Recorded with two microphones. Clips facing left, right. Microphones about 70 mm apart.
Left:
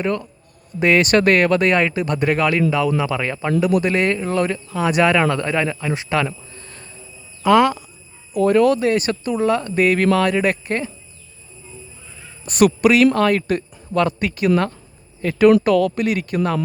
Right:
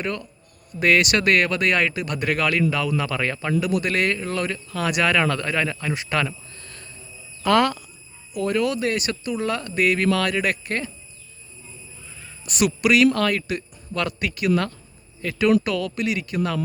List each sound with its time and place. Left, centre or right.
0.0 s speech: left
1.0 s speech: left; by 3.5 s centre
3.8 s speech: left
6.2 s a sound: left
7.4 s speech: centre
8.3 s speech: left
12.5 s a man's voice: left